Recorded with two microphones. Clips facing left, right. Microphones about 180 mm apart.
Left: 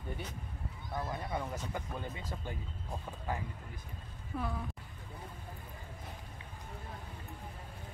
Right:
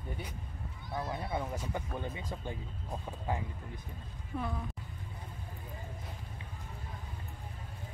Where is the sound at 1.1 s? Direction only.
10° right (ahead or behind).